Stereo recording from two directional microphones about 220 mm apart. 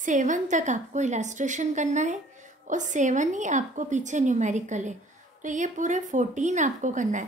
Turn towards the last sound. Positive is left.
turn(degrees=-35)  # may be behind; listen again after turning